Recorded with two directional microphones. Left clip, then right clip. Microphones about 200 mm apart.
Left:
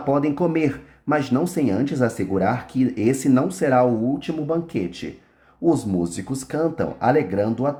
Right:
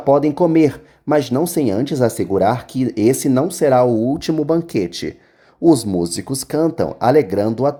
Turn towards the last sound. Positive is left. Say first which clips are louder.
# right 5 dB
turn(degrees=-40)  # may be behind; listen again after turning